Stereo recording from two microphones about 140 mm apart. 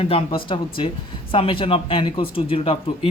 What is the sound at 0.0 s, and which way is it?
Speech, 40° left (ahead or behind).